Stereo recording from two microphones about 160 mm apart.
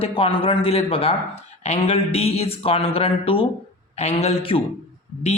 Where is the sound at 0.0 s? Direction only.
35° left (ahead or behind).